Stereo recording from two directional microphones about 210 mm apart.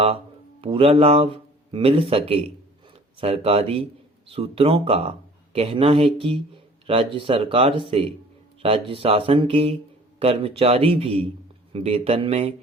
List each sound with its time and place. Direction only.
0.6 s speech: 25° right (ahead or behind)